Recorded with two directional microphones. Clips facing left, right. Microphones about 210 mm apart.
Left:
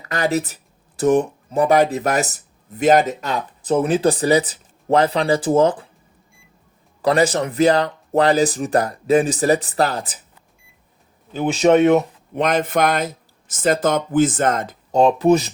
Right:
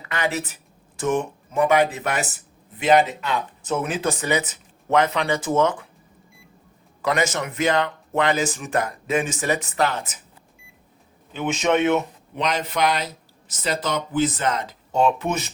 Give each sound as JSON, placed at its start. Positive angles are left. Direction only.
{"t": 0.1, "sound": "speech", "side_deg": 40}
{"t": 7.0, "sound": "speech", "side_deg": 35}
{"t": 11.3, "sound": "speech", "side_deg": 35}
{"t": 12.4, "sound": "speech", "side_deg": 50}